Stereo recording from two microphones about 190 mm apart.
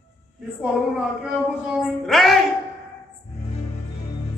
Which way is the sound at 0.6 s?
5° right (ahead or behind).